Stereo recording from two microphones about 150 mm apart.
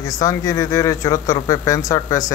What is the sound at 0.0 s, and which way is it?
Speech, 20° left (ahead or behind).